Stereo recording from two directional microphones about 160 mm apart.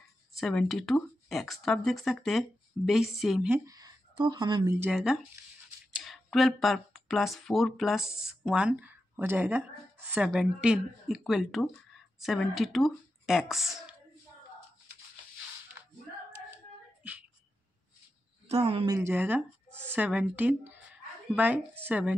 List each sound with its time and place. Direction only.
0.4 s speech: 5° left (ahead or behind)
3.4 s speech: 10° right (ahead or behind)
3.7 s speech: 25° right (ahead or behind)
4.9 s speech: centre (ahead or behind)
18.5 s speech: 35° right (ahead or behind)
18.9 s speech: 15° right (ahead or behind)